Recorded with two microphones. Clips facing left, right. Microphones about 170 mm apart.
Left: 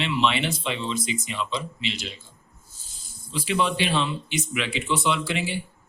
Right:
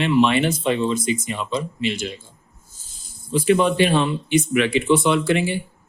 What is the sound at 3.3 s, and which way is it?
Speech, 50° right (ahead or behind).